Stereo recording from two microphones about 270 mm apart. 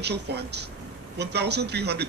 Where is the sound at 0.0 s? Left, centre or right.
Right.